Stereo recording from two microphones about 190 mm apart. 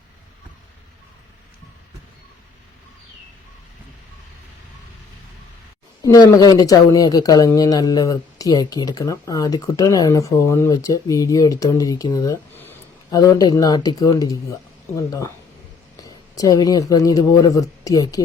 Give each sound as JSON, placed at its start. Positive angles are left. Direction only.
{"t": 6.3, "sound": "speech", "side_deg": 20}